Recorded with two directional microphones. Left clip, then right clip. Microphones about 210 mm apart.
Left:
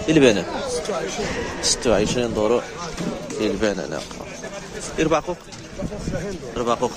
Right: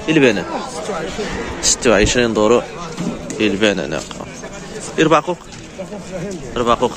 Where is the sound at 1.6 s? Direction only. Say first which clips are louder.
Right 6 dB; centre (ahead or behind).